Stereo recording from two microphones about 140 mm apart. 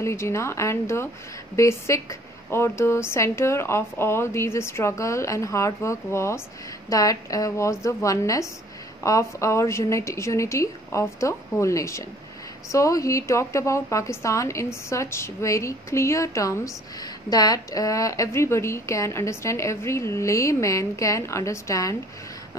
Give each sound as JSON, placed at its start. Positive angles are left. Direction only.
{"t": 0.0, "sound": "a woman's voice", "side_deg": 20}